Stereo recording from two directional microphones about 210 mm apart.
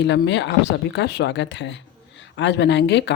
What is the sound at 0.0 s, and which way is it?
Speech, 55° left (ahead or behind).